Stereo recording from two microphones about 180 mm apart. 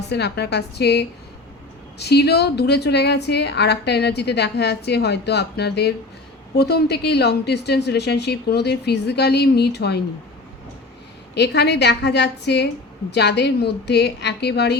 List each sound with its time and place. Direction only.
0.1 s a woman's voice: 65° left (ahead or behind)
11.3 s a woman's voice: 70° left (ahead or behind)